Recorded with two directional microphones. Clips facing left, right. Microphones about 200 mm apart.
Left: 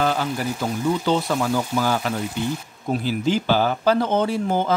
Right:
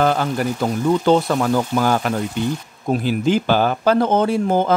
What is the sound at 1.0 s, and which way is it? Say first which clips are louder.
Speech: right 5 dB; 50° right (ahead or behind).